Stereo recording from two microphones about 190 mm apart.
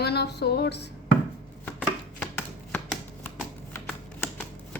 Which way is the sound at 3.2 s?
10° left (ahead or behind).